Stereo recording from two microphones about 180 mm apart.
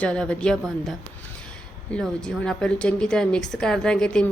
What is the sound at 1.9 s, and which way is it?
A woman's voice, 5° left (ahead or behind).